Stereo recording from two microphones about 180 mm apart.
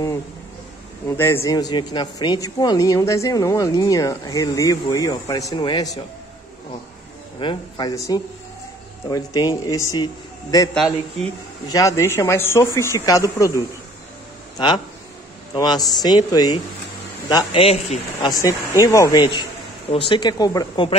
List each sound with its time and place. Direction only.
1.0 s speech: 10° left (ahead or behind)
7.3 s speech: 25° left (ahead or behind)
10.7 s a man's voice: 5° left (ahead or behind)
11.7 s a man's voice: 15° left (ahead or behind)
15.5 s speech: 25° left (ahead or behind)
18.3 s speech: 20° left (ahead or behind)